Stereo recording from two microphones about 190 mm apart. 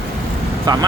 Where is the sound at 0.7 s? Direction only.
20° right (ahead or behind).